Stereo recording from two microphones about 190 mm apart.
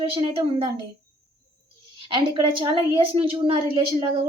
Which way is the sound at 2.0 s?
25° right (ahead or behind).